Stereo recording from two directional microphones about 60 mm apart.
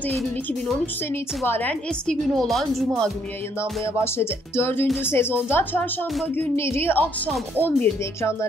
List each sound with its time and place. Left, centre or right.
1.1 s speech: left
1.7 s a woman's voice: centre
2.3 s a woman's voice: centre
3.8 s speech: left
6.3 s speech: left
8.0 s speech: left